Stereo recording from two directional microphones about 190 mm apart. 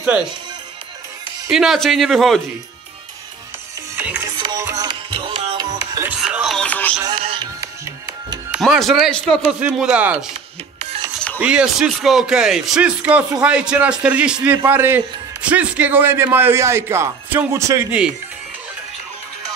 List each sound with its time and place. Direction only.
0.0 s speech: 5° right (ahead or behind)
1.5 s speech: centre (ahead or behind)
3.9 s music: 10° right (ahead or behind)
6.0 s music: 5° right (ahead or behind)
7.2 s music: 30° right (ahead or behind)
8.5 s a man's voice: centre (ahead or behind)
11.3 s a man's voice: 5° right (ahead or behind)